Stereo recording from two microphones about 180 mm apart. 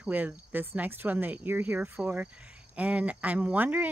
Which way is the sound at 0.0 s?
10° right (ahead or behind).